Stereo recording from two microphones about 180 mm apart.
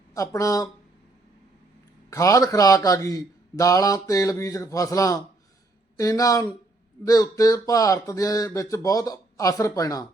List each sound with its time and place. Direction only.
0.1 s speech: 15° left (ahead or behind)
2.0 s a man's voice: 20° left (ahead or behind)